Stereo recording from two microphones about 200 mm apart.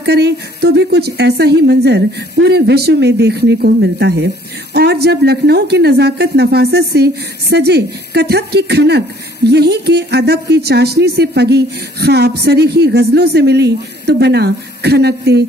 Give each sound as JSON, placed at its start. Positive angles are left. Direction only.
{"t": 0.0, "sound": "speech", "side_deg": -55}